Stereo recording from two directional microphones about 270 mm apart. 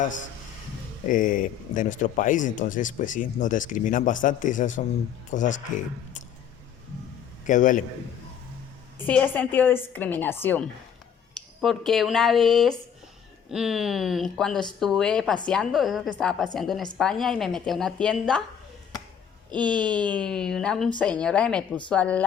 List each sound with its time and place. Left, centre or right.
1.0 s speech: left
7.4 s a man's voice: left
9.0 s a woman's voice: centre
19.5 s speech: centre
19.7 s a woman's voice: centre